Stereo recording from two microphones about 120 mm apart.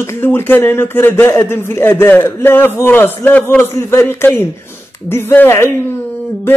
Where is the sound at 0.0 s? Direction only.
20° left (ahead or behind).